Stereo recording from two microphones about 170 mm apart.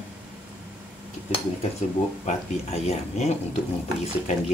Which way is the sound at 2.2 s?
40° left (ahead or behind).